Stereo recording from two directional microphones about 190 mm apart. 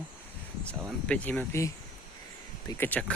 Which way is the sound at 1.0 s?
5° left (ahead or behind).